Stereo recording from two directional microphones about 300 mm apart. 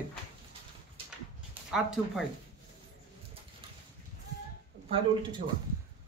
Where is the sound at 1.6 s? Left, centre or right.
Centre.